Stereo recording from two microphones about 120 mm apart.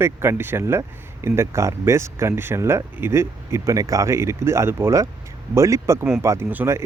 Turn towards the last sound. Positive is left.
turn(degrees=-20)  # may be behind; listen again after turning